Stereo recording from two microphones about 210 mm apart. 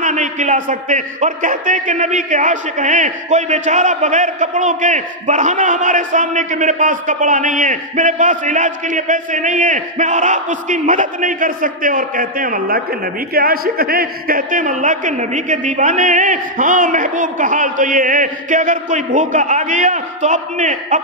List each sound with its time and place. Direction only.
0.0 s a man's voice: 35° right (ahead or behind)